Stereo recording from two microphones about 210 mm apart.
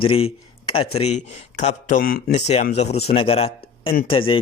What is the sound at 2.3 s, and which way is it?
Speech, 35° left (ahead or behind).